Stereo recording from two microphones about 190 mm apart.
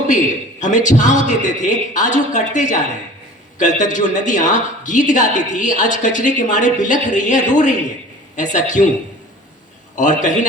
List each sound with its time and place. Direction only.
0.6 s speech: 40° left (ahead or behind)
9.9 s speech: 40° left (ahead or behind)